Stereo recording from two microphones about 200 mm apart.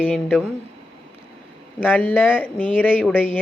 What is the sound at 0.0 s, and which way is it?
Speech, 5° left (ahead or behind).